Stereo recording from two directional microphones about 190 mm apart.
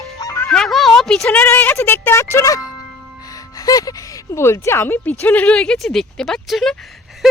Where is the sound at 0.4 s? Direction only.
Centre (ahead or behind).